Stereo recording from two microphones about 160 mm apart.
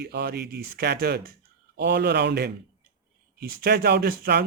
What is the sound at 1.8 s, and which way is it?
Speech, 90° right.